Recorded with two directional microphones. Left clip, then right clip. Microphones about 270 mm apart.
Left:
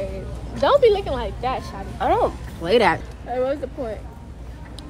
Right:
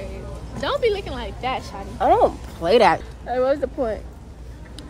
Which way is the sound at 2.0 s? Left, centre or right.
Right.